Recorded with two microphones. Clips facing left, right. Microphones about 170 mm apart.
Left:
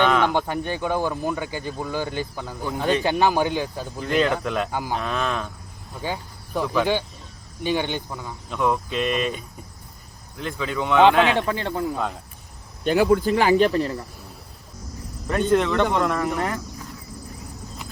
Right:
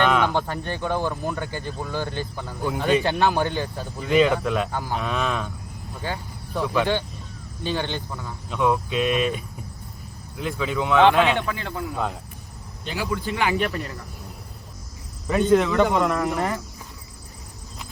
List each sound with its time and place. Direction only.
0.0 s a sound: 5° right (ahead or behind)
0.3 s a man's voice: 15° left (ahead or behind)
4.0 s speech: centre (ahead or behind)
4.7 s a man's voice: 10° left (ahead or behind)
4.9 s speech: centre (ahead or behind)
6.0 s a man's voice: 15° left (ahead or behind)
8.4 s speech: centre (ahead or behind)
11.3 s speech: 30° left (ahead or behind)
12.8 s a man's voice: 55° left (ahead or behind)
13.3 s speech: 35° left (ahead or behind)
15.3 s speech: centre (ahead or behind)